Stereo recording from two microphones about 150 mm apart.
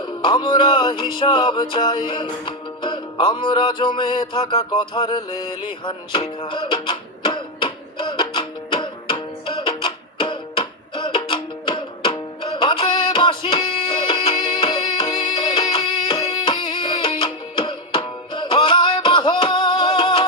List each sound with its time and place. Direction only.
0.0 s music: 30° left (ahead or behind)